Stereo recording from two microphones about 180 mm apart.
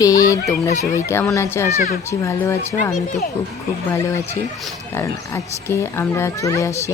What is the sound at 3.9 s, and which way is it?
Speech, 15° left (ahead or behind).